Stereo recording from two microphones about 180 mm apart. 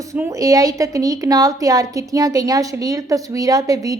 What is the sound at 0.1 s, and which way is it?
A woman's voice, 20° right (ahead or behind).